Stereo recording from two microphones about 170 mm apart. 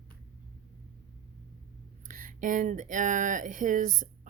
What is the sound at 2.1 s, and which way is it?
Speech, 50° right (ahead or behind).